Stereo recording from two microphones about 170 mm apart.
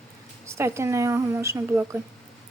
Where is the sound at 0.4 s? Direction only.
15° right (ahead or behind).